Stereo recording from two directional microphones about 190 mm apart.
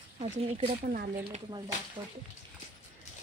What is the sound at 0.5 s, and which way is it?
Speech, 35° right (ahead or behind).